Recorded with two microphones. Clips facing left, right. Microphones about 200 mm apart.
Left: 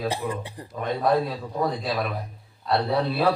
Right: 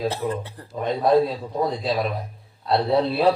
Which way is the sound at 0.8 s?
25° right (ahead or behind).